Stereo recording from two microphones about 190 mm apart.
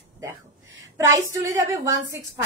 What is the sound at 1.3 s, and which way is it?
Speech, 20° right (ahead or behind).